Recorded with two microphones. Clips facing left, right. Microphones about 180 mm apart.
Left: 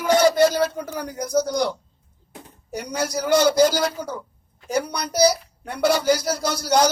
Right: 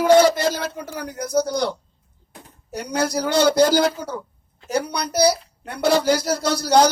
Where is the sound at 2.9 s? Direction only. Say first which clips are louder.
Even; 60° right (ahead or behind).